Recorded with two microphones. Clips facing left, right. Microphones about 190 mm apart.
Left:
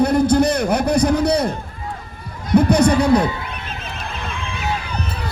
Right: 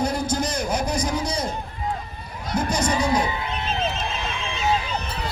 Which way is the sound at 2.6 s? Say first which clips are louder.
Left 9 dB; 60° left (ahead or behind).